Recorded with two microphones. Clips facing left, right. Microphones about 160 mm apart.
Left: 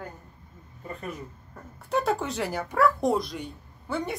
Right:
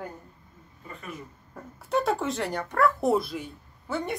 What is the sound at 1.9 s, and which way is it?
Speech, centre (ahead or behind).